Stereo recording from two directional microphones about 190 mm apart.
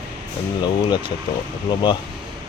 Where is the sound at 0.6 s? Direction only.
25° left (ahead or behind).